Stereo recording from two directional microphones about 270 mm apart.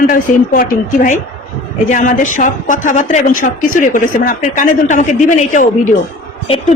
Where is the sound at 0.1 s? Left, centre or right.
Left.